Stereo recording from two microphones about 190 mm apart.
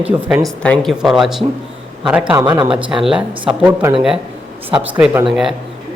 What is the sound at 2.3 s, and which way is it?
Speech, 20° right (ahead or behind).